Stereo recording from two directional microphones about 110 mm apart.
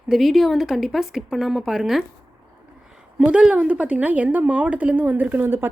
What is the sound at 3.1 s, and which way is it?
A woman's voice, 10° right (ahead or behind).